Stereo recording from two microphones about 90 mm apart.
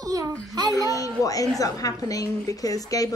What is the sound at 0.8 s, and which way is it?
A woman's voice, 40° left (ahead or behind).